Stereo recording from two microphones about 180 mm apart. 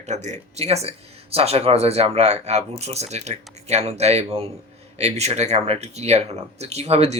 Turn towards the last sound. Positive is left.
turn(degrees=-35)  # may be behind; listen again after turning